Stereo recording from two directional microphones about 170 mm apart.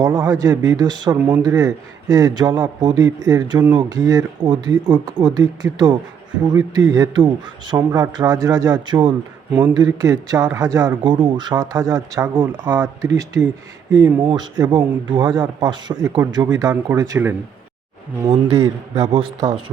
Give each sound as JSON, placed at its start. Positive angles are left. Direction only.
{"t": 0.0, "sound": "speech", "side_deg": -15}